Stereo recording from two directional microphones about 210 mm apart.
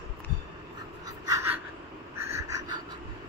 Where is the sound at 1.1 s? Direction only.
15° right (ahead or behind).